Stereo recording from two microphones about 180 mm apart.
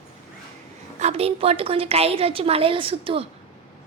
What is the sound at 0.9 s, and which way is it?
A woman's voice, 35° right (ahead or behind).